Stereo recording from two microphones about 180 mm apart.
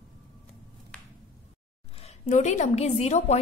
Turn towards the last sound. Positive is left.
turn(degrees=35)  # may be behind; listen again after turning